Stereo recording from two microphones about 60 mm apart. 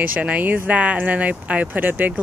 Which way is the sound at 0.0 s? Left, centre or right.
Right.